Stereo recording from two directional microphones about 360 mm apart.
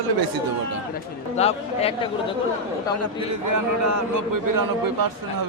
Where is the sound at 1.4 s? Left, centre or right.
Centre.